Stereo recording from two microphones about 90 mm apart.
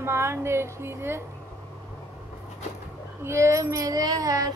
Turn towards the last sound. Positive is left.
turn(degrees=-40)  # may be behind; listen again after turning